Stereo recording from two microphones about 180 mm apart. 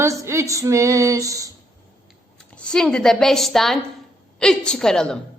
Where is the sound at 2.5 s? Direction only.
5° left (ahead or behind).